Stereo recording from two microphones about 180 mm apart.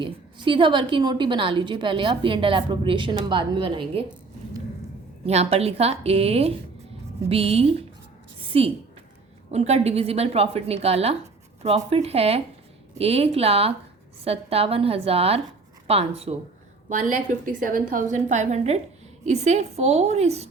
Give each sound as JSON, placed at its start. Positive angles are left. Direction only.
{"t": 0.0, "sound": "a woman's voice", "side_deg": -25}
{"t": 5.2, "sound": "a woman's voice", "side_deg": -35}
{"t": 8.4, "sound": "a sound", "side_deg": -30}
{"t": 9.5, "sound": "a woman's voice", "side_deg": -35}
{"t": 16.9, "sound": "a woman's voice", "side_deg": -45}